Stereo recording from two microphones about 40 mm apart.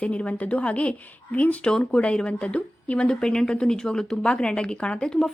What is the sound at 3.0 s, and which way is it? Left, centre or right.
A woman's voice, left.